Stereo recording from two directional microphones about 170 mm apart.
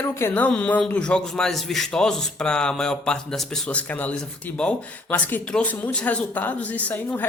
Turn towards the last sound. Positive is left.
turn(degrees=10)  # may be behind; listen again after turning